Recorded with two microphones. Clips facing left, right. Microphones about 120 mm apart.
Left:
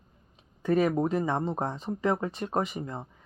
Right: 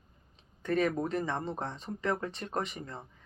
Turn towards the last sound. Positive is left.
turn(degrees=30)  # may be behind; listen again after turning